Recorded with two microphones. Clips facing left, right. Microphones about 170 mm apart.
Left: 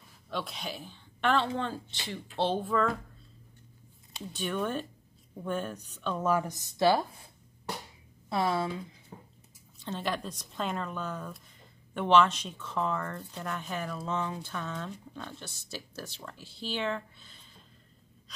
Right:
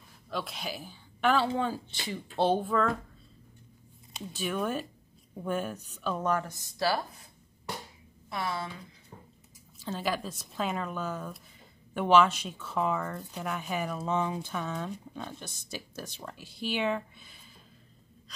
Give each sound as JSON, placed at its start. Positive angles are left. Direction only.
{"t": 0.3, "sound": "speech", "side_deg": 0}
{"t": 4.3, "sound": "speech", "side_deg": -5}
{"t": 6.4, "sound": "speech", "side_deg": 20}
{"t": 8.3, "sound": "speech", "side_deg": 30}
{"t": 9.8, "sound": "speech", "side_deg": -5}